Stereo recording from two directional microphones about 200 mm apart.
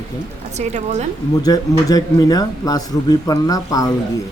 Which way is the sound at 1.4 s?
20° left (ahead or behind).